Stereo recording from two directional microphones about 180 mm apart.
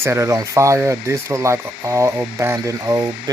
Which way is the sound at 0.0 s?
15° right (ahead or behind).